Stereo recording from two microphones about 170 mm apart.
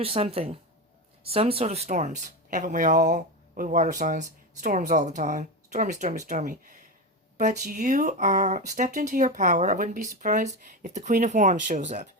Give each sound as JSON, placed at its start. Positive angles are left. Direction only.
{"t": 0.0, "sound": "a woman's voice", "side_deg": -35}